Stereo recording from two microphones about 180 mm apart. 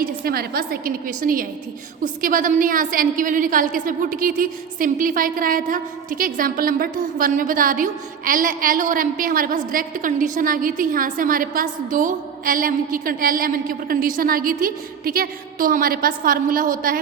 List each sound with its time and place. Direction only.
0.0 s a woman's voice: 55° right (ahead or behind)